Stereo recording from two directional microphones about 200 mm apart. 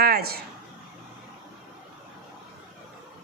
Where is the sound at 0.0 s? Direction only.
50° right (ahead or behind).